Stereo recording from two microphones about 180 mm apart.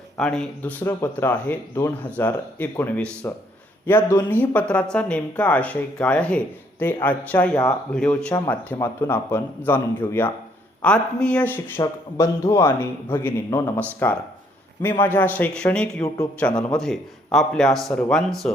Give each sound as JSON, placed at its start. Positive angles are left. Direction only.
{"t": 0.2, "sound": "speech", "side_deg": 5}